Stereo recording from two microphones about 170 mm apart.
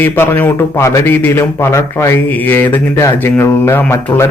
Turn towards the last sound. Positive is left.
turn(degrees=15)  # may be behind; listen again after turning